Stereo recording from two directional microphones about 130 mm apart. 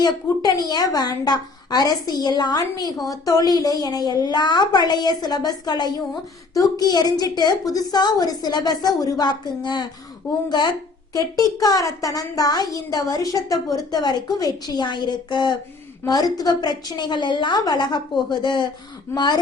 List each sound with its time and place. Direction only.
0.0 s a woman's voice: 30° left (ahead or behind)
11.1 s a woman's voice: 30° left (ahead or behind)